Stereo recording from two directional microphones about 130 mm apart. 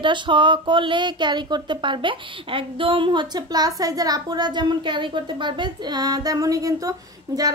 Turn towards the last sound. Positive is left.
turn(degrees=-25)  # may be behind; listen again after turning